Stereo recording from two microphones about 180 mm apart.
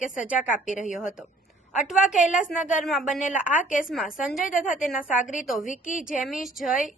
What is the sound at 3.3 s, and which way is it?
A woman's voice, 10° right (ahead or behind).